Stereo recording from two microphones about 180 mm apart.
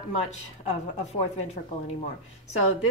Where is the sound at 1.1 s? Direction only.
35° left (ahead or behind).